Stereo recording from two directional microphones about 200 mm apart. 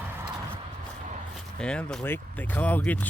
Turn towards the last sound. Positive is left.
turn(degrees=10)  # may be behind; listen again after turning